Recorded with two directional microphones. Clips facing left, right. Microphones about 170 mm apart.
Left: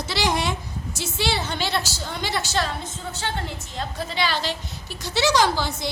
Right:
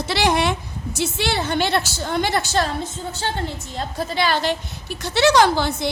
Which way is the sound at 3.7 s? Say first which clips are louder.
Right 4 dB; 40° right (ahead or behind).